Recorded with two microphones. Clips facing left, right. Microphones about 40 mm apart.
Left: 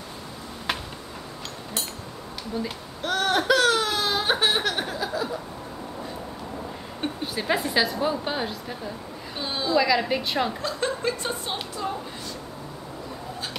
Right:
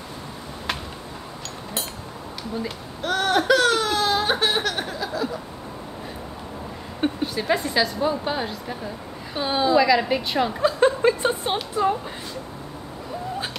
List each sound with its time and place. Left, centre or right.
2.6 s baby cry: centre
7.0 s a sound: centre
7.3 s a woman's voice: centre
9.3 s a woman's voice: centre
9.8 s a woman's voice: centre
10.6 s speech: right